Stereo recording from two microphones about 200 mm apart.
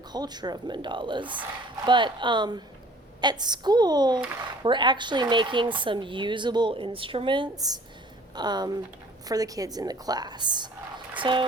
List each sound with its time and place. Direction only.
0.1 s speech: 20° right (ahead or behind)